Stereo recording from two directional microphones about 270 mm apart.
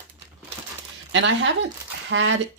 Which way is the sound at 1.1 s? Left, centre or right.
Right.